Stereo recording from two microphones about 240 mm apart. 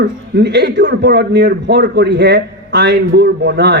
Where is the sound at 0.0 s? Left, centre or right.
Right.